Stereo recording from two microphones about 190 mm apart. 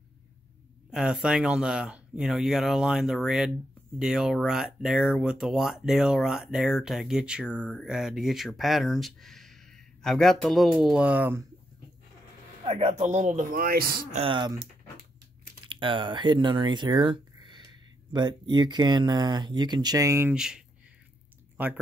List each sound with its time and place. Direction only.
0.8 s speech: 5° right (ahead or behind)
7.4 s speech: 5° left (ahead or behind); by 11.4 s 10° right (ahead or behind)
12.6 s a man's voice: 30° right (ahead or behind); by 14.0 s 50° right (ahead or behind)
14.1 s speech: 25° right (ahead or behind)
15.6 s speech: 25° right (ahead or behind); by 21.7 s 10° right (ahead or behind)